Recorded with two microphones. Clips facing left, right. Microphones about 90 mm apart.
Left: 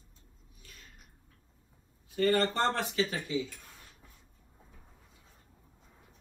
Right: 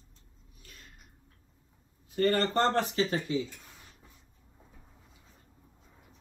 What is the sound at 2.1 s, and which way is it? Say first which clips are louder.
Speech: right 1 dB; 45° right (ahead or behind).